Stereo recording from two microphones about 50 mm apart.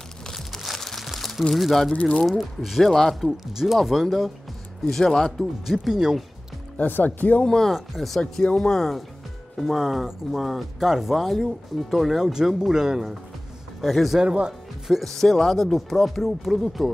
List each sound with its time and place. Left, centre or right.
0.7 s a sound: centre
1.5 s speech: centre
5.7 s speech: centre
7.1 s speech: left
7.4 s speech: centre
7.7 s speech: centre
8.2 s speech: centre
13.7 s speech: centre
14.2 s speech: centre
15.0 s speech: centre